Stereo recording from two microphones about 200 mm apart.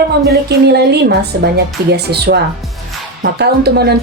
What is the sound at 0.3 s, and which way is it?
A woman's voice, 55° right (ahead or behind).